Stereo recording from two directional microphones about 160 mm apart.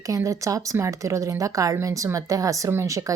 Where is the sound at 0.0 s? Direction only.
20° right (ahead or behind).